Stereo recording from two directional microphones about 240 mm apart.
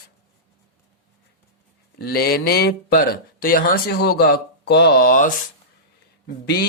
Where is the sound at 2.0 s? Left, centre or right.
Left.